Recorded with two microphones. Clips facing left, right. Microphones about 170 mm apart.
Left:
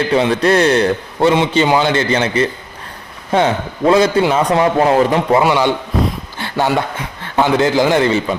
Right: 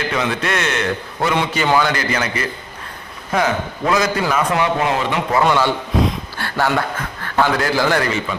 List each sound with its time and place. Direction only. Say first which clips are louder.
0.1 s a man's voice: left 10 dB; 30° left (ahead or behind)
5.4 s a man's voice: left 2 dB; 15° left (ahead or behind)